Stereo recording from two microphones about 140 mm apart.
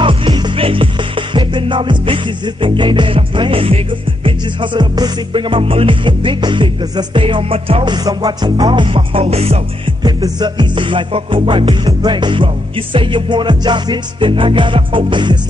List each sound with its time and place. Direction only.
0.0 s music: 35° right (ahead or behind)
10.0 s music: 30° right (ahead or behind)